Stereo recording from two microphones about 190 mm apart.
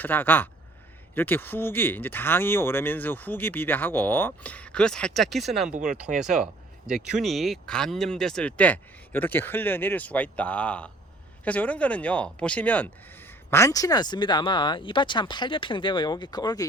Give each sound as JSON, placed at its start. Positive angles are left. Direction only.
{"t": 0.0, "sound": "speech", "side_deg": 10}